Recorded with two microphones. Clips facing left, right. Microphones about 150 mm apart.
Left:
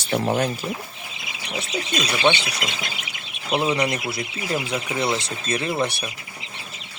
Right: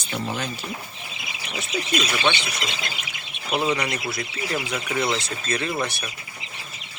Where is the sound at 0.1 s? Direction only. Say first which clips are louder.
Left 7 dB; 55° left (ahead or behind).